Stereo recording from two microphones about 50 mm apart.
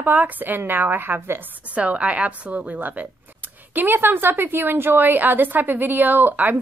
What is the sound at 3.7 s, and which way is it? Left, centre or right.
A woman's voice, right.